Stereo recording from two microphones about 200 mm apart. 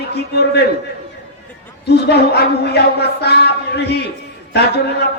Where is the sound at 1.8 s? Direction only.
55° left (ahead or behind).